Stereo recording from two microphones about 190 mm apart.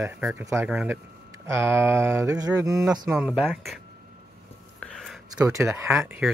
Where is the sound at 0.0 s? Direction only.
10° right (ahead or behind).